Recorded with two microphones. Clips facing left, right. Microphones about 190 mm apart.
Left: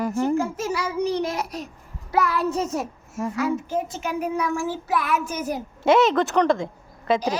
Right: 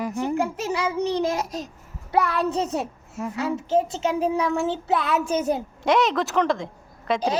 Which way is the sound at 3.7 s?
25° right (ahead or behind).